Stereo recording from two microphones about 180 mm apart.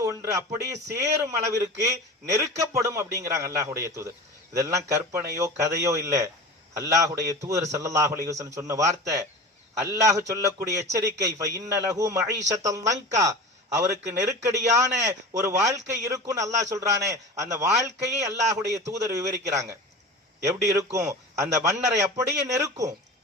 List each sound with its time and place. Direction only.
0.0 s a man's voice: 15° right (ahead or behind)